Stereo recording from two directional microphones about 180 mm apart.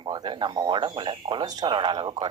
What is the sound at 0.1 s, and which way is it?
Speech, 25° right (ahead or behind).